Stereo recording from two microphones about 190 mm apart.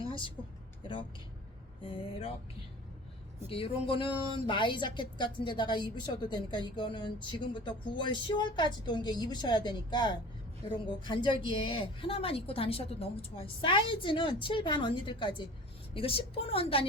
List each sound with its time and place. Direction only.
0.0 s vehicle: 25° left (ahead or behind)
1.8 s speech: 30° left (ahead or behind)
3.5 s speech: 30° left (ahead or behind)